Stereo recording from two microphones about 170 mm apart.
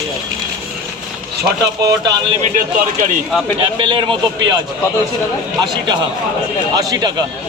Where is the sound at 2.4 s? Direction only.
50° right (ahead or behind).